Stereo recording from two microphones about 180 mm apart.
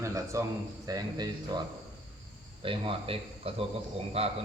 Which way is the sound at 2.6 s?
30° right (ahead or behind).